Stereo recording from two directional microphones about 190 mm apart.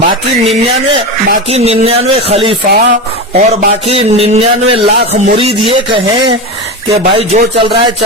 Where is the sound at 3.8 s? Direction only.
30° right (ahead or behind).